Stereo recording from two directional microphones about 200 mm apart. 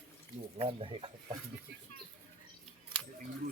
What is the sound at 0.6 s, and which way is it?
Speech, 30° right (ahead or behind).